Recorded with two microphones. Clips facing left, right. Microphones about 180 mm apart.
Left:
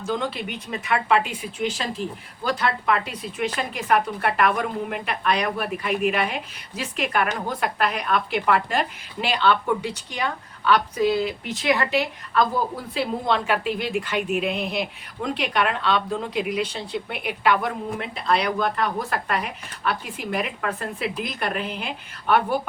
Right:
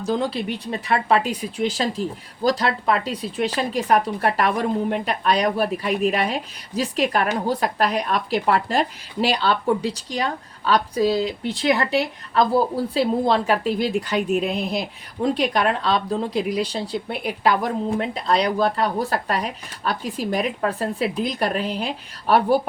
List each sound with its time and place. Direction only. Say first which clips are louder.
0.0 s a woman's voice: right 4 dB; 35° right (ahead or behind)